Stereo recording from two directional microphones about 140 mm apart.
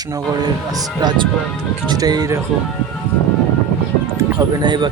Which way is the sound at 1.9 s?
30° right (ahead or behind).